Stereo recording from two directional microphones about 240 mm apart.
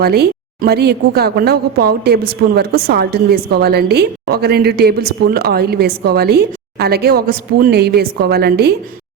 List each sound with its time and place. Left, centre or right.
0.0 s a woman's voice: right